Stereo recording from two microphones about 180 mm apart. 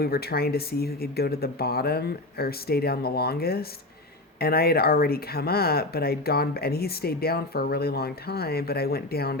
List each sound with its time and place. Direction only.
0.0 s speech: 60° left (ahead or behind)